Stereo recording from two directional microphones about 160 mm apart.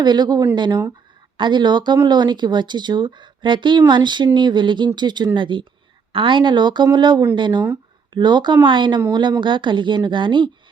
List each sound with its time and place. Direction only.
0.0 s speech: 25° right (ahead or behind)